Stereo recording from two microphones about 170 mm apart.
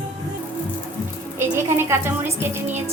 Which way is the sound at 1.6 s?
15° right (ahead or behind).